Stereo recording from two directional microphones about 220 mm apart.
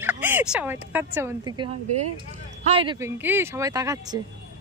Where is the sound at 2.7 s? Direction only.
25° right (ahead or behind).